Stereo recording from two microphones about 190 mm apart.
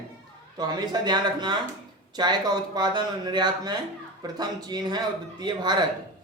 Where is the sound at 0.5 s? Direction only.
20° right (ahead or behind).